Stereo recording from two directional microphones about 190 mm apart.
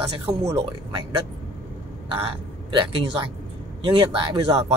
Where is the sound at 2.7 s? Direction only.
30° right (ahead or behind).